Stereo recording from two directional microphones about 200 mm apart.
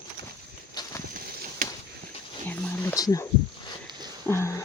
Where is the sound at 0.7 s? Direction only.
20° left (ahead or behind).